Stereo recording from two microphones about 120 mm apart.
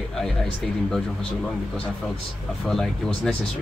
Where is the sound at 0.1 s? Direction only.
5° left (ahead or behind).